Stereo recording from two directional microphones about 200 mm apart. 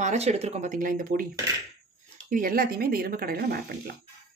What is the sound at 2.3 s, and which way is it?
Speech, 45° right (ahead or behind).